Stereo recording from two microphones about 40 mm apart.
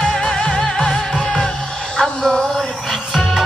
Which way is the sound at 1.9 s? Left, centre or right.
Centre.